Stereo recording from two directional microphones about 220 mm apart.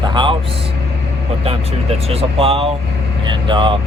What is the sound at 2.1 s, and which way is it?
Speech, 25° right (ahead or behind).